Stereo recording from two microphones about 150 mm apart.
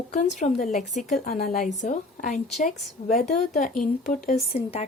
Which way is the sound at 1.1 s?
75° left (ahead or behind).